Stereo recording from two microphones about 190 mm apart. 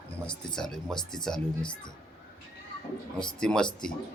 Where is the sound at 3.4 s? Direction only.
5° left (ahead or behind).